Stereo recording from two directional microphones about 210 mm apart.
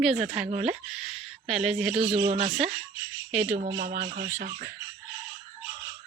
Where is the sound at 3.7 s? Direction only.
45° right (ahead or behind).